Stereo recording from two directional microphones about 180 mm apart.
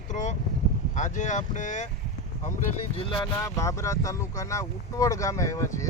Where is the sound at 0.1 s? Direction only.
40° left (ahead or behind).